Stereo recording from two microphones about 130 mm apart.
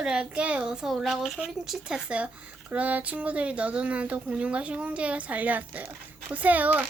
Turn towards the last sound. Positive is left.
turn(degrees=-15)  # may be behind; listen again after turning